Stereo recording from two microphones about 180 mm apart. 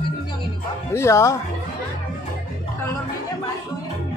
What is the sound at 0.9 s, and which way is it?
Speech, 15° left (ahead or behind).